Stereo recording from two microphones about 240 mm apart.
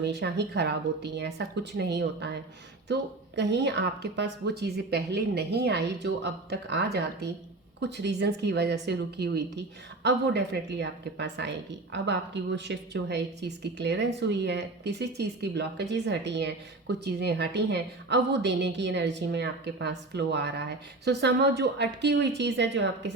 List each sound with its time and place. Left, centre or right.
0.0 s speech: right